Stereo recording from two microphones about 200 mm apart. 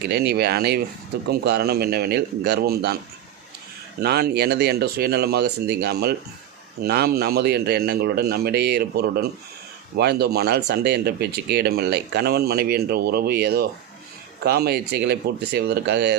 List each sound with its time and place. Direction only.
0.0 s speech: 55° right (ahead or behind)
4.0 s speech: 55° right (ahead or behind)